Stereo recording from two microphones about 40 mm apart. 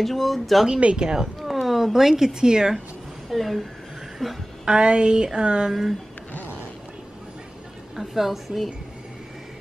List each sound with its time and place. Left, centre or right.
0.0 s a woman's voice: centre
0.9 s speech: centre
3.3 s a woman's voice: centre
4.6 s a sound: right
5.7 s speech: centre
7.9 s a woman's voice: centre